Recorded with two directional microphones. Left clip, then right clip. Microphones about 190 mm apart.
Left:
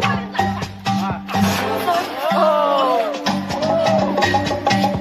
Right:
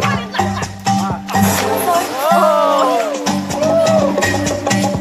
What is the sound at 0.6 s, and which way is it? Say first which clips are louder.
Music: right 5 dB; 40° left (ahead or behind).